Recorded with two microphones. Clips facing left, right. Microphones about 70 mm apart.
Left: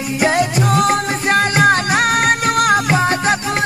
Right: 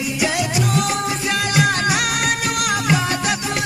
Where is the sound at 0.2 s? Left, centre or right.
Left.